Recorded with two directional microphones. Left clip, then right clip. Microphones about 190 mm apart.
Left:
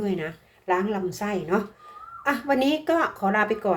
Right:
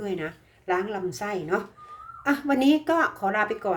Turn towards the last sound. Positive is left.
turn(degrees=0)  # may be behind; listen again after turning